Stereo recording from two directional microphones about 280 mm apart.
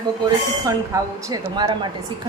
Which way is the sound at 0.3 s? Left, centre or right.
Centre.